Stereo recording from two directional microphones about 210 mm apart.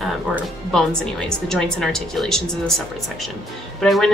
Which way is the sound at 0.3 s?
5° right (ahead or behind).